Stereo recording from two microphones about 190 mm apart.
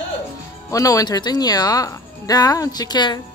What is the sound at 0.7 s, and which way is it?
Speech, 20° left (ahead or behind).